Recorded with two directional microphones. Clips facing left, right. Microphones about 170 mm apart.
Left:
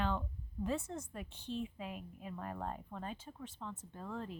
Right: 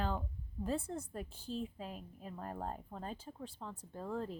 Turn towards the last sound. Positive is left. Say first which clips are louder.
# right 3 dB
turn(degrees=-40)  # may be behind; listen again after turning